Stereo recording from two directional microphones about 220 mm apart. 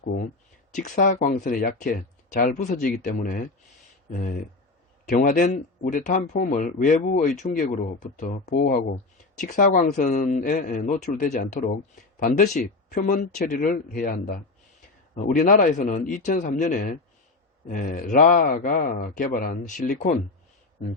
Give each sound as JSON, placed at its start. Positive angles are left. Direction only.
{"t": 0.7, "sound": "speech", "side_deg": 35}